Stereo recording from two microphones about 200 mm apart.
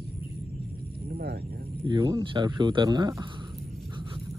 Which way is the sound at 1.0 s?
50° right (ahead or behind).